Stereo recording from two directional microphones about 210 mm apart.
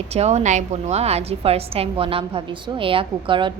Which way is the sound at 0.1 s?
30° right (ahead or behind).